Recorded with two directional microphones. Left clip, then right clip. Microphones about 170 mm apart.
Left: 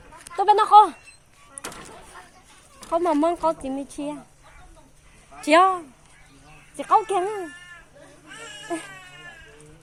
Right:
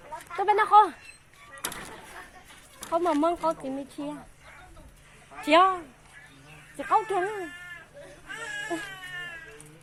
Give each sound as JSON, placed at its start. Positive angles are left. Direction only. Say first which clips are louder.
{"t": 0.3, "sound": "speech", "louder": "left 5 dB", "side_deg": 35}
{"t": 2.9, "sound": "speech", "louder": "left 4 dB", "side_deg": 30}
{"t": 5.5, "sound": "speech", "louder": "left 3 dB", "side_deg": 35}